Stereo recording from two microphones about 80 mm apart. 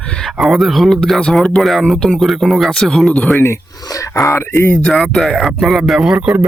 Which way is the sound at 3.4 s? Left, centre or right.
Left.